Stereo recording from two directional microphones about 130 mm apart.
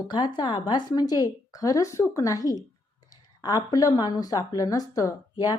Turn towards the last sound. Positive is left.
turn(degrees=30)  # may be behind; listen again after turning